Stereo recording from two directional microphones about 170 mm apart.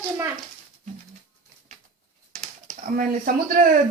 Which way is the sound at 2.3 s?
45° right (ahead or behind).